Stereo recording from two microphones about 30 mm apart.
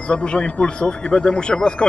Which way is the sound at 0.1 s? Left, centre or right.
Left.